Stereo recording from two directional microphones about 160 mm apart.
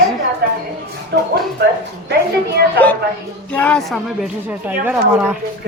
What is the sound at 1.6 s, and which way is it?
Speech, 90° right.